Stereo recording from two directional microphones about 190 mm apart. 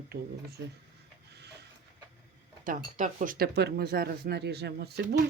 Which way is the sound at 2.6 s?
45° right (ahead or behind).